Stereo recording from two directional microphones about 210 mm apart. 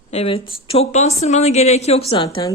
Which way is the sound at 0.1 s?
30° left (ahead or behind).